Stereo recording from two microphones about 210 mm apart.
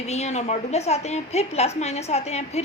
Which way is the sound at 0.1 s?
30° left (ahead or behind).